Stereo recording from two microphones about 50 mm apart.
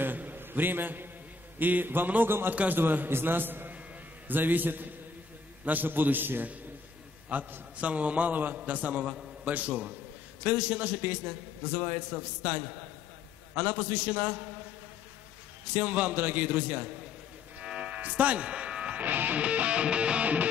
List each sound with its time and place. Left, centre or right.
0.0 s a sound: right
1.6 s a man's voice: right
2.5 s music: right
2.8 s a man's voice: right
8.5 s music: right
9.0 s a man's voice: centre
9.4 s a man's voice: right
13.6 s music: right
15.7 s music: right
19.0 s music: right